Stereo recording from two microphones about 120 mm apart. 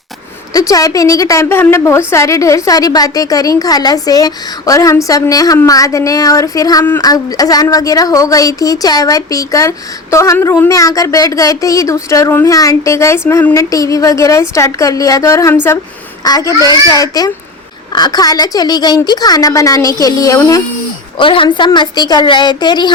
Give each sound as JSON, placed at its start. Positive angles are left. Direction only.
{"t": 0.5, "sound": "a woman's voice", "side_deg": 30}
{"t": 21.2, "sound": "a woman's voice", "side_deg": 45}